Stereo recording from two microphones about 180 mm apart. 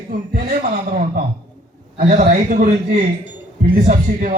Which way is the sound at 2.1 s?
45° right (ahead or behind).